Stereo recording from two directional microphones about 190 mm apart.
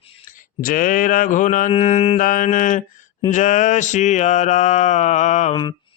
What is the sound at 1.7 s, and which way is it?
Mantra, 35° left (ahead or behind).